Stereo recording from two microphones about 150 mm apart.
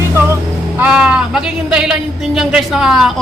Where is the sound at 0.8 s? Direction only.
10° right (ahead or behind).